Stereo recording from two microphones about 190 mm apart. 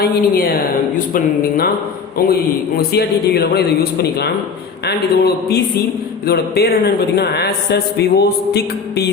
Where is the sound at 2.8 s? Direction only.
55° left (ahead or behind).